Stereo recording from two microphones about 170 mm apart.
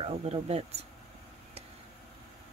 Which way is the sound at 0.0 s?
35° right (ahead or behind).